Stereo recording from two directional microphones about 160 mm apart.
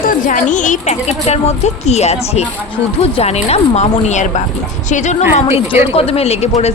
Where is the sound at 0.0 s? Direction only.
60° left (ahead or behind).